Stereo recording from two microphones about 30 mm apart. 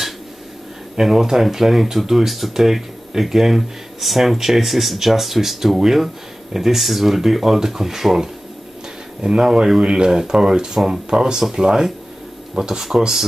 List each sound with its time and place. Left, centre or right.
1.0 s speech: centre
9.8 s speech: right